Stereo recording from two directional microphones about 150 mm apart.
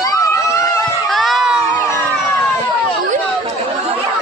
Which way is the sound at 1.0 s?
Centre (ahead or behind).